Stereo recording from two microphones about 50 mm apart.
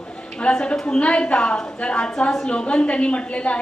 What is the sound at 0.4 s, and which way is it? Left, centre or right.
A woman's voice, centre.